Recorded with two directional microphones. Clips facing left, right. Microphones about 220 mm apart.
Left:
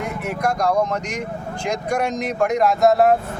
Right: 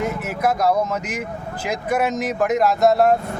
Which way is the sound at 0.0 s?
Centre (ahead or behind).